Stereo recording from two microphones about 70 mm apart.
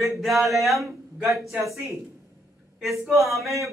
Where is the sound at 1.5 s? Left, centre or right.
Right.